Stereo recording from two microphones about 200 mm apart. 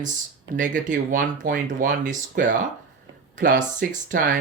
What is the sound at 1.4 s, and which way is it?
Speech, 40° right (ahead or behind).